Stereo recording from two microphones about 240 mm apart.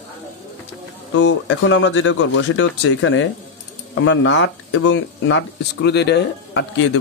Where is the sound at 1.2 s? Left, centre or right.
Left.